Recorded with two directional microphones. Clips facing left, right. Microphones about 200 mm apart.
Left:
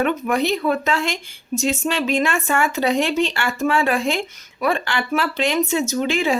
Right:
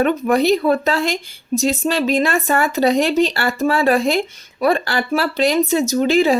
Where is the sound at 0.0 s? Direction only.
35° right (ahead or behind).